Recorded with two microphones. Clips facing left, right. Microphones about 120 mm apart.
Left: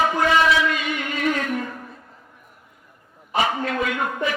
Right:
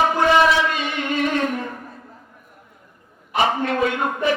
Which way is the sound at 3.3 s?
30° right (ahead or behind).